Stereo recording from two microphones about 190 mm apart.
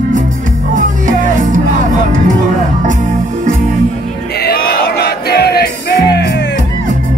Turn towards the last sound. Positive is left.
turn(degrees=60)  # may be behind; listen again after turning